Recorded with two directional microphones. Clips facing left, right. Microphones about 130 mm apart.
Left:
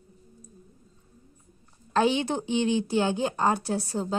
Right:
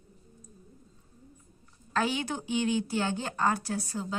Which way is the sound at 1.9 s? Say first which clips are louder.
Left 6 dB; 25° left (ahead or behind).